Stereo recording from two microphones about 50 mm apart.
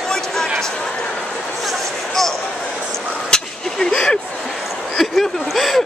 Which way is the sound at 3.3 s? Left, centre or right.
Centre.